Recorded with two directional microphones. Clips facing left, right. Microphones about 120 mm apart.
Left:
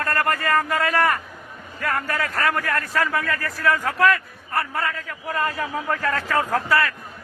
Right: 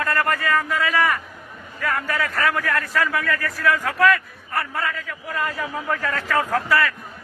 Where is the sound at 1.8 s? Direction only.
45° left (ahead or behind).